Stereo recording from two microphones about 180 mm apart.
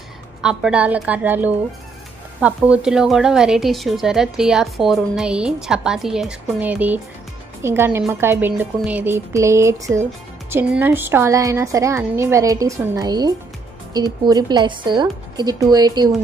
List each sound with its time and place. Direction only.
0.4 s a woman's voice: 5° right (ahead or behind); by 16.2 s 20° right (ahead or behind)